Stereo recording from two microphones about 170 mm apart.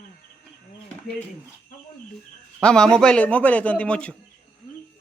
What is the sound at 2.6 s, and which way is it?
A man's voice, 5° left (ahead or behind).